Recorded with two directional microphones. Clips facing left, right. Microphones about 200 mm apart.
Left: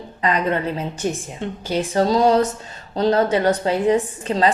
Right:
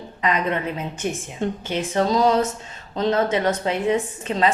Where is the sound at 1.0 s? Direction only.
35° left (ahead or behind).